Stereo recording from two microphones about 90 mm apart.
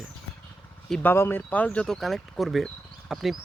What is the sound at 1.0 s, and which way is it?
Speech, 25° left (ahead or behind).